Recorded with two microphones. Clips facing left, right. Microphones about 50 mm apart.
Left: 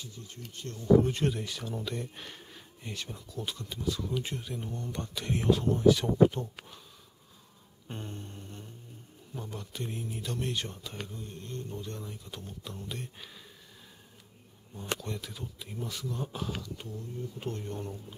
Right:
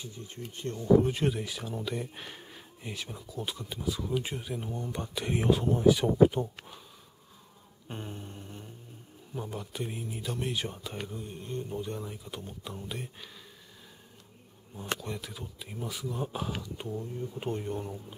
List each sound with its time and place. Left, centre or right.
0.0 s speech: right
1.0 s speech: centre
7.9 s speech: centre
15.0 s speech: centre